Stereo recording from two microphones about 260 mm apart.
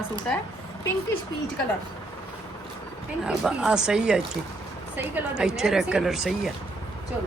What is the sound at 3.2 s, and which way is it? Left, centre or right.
A woman's voice, centre.